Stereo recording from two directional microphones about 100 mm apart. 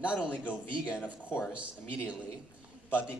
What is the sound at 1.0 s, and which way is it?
Speech, 20° left (ahead or behind).